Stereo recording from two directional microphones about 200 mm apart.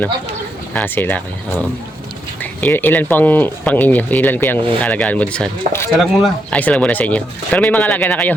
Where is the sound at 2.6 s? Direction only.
10° left (ahead or behind).